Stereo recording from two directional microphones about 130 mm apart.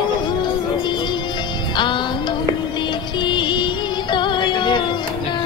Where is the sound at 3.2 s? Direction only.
35° left (ahead or behind).